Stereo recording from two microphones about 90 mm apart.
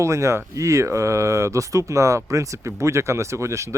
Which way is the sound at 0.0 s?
35° right (ahead or behind).